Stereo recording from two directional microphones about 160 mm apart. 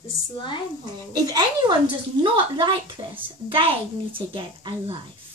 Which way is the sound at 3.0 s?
15° right (ahead or behind).